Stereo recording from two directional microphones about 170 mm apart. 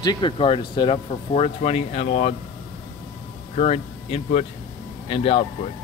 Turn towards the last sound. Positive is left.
turn(degrees=35)  # may be behind; listen again after turning